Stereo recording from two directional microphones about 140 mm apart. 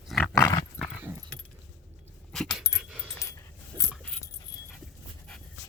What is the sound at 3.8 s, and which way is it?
Keys jangling, 20° left (ahead or behind).